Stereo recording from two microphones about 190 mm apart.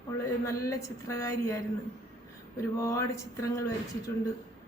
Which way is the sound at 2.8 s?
15° left (ahead or behind).